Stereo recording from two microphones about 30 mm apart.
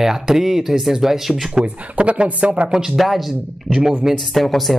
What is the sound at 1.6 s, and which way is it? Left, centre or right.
Speech, right.